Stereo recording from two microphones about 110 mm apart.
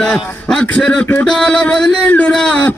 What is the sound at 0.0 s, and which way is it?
A man's voice, 5° left (ahead or behind).